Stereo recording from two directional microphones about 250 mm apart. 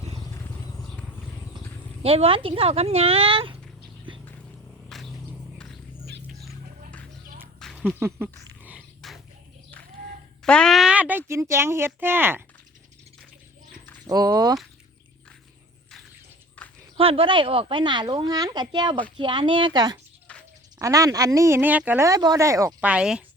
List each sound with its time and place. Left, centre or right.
2.0 s speech: right
4.9 s a sound: centre
7.6 s dog: centre
10.4 s speech: centre
14.1 s speech: centre
16.6 s a sound: centre
17.0 s speech: right
20.2 s a sound: centre
20.8 s speech: centre